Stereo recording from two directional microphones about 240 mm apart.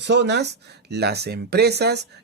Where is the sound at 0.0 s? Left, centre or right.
Right.